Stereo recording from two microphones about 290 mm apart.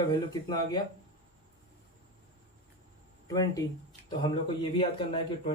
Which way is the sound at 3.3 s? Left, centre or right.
Centre.